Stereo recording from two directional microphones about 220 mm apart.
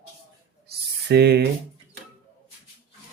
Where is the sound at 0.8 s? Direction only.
45° right (ahead or behind).